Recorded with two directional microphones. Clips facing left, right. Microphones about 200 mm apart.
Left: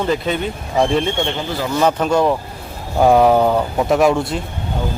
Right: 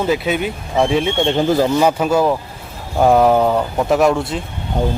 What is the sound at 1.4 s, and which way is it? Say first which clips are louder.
Speech: right 8 dB; 40° right (ahead or behind).